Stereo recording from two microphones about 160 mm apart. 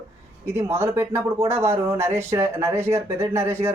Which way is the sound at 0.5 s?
15° right (ahead or behind).